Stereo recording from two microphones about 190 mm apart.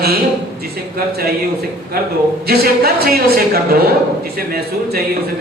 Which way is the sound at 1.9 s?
55° right (ahead or behind).